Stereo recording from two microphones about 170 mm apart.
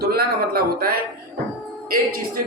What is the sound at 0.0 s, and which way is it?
Speech, 65° right (ahead or behind).